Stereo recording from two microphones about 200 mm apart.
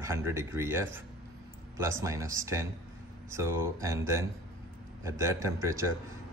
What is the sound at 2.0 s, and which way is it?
A man's voice, 15° right (ahead or behind).